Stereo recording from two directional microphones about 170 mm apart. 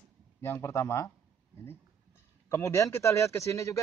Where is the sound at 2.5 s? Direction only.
15° left (ahead or behind).